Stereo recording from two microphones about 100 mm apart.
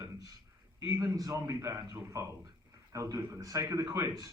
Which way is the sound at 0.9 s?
35° right (ahead or behind).